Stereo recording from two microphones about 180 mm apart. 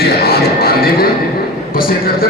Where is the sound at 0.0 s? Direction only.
60° left (ahead or behind).